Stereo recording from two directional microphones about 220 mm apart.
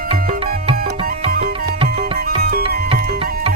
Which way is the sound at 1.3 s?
45° right (ahead or behind).